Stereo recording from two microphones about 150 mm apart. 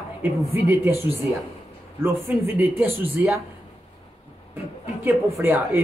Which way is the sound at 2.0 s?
15° right (ahead or behind).